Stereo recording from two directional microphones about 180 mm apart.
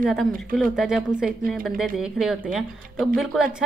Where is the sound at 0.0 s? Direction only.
Centre (ahead or behind).